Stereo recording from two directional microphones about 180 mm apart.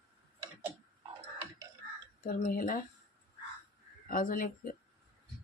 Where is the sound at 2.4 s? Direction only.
50° left (ahead or behind).